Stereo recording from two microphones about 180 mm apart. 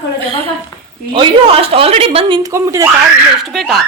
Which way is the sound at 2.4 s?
15° right (ahead or behind).